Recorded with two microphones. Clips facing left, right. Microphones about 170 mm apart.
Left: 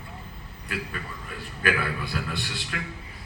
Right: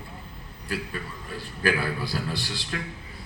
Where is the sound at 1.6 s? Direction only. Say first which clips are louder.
Right 1 dB; 35° right (ahead or behind).